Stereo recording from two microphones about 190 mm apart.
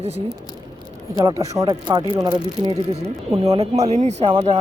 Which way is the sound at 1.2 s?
15° right (ahead or behind).